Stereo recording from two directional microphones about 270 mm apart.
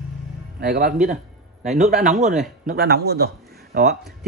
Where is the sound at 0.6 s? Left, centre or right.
Right.